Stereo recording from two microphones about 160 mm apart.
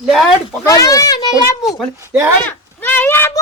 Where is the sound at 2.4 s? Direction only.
10° left (ahead or behind).